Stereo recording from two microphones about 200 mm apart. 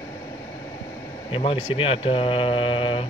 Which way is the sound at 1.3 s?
25° left (ahead or behind).